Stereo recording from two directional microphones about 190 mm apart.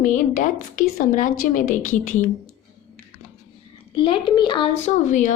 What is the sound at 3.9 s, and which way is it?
Speech, 25° left (ahead or behind).